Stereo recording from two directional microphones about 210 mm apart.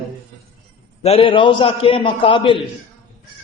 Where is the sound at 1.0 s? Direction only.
25° left (ahead or behind).